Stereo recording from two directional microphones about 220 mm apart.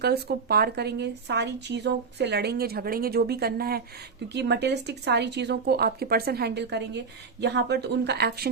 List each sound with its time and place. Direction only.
0.0 s speech: 45° right (ahead or behind)